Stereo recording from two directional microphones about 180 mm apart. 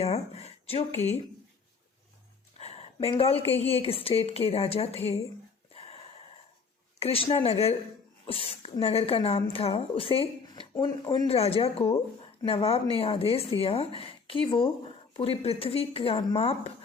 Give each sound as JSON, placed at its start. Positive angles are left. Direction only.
{"t": 0.0, "sound": "speech", "side_deg": 35}
{"t": 2.6, "sound": "speech", "side_deg": 35}
{"t": 5.7, "sound": "a sound", "side_deg": 35}
{"t": 7.0, "sound": "speech", "side_deg": 35}